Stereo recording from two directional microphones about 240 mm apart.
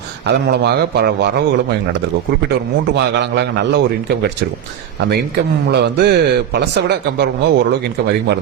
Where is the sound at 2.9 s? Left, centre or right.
Right.